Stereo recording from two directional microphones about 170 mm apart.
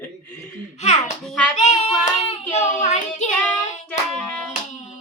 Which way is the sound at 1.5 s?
40° left (ahead or behind).